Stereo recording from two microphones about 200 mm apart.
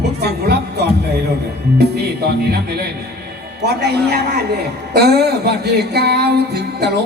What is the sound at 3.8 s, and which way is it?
Music, 55° right (ahead or behind).